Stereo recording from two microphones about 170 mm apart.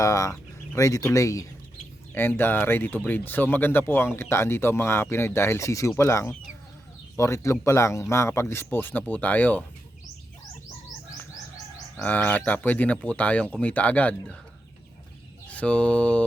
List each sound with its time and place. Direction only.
0.0 s speech: 20° left (ahead or behind)
11.9 s speech: 10° left (ahead or behind)
15.4 s mantra: 5° left (ahead or behind)